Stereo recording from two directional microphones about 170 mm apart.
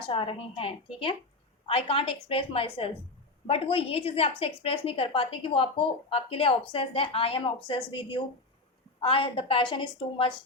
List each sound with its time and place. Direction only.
0.0 s a woman's voice: 30° left (ahead or behind)